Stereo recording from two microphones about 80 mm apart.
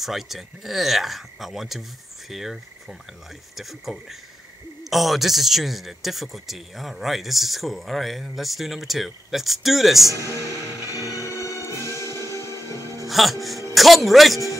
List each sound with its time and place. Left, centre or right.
0.0 s speech: centre
10.1 s speech: right
11.1 s music: left
13.0 s speech: centre